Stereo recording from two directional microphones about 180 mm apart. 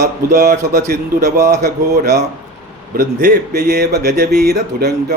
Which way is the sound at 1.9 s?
40° right (ahead or behind).